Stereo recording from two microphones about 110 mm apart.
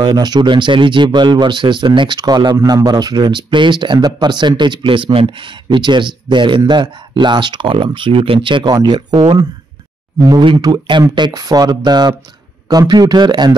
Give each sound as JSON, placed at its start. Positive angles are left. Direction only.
{"t": 0.0, "sound": "speech", "side_deg": -40}
{"t": 10.6, "sound": "speech", "side_deg": -40}